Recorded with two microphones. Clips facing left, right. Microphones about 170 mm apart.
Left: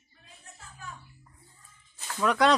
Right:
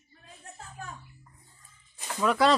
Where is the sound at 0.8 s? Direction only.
45° right (ahead or behind).